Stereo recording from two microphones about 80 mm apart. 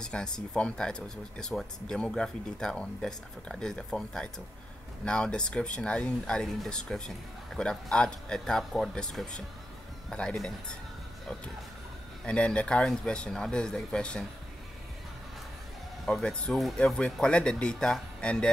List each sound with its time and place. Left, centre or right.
0.0 s speech: centre
12.3 s speech: centre
16.1 s speech: centre